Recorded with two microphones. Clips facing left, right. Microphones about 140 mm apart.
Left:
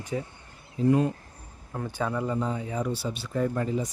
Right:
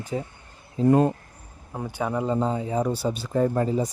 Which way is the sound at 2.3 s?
30° right (ahead or behind).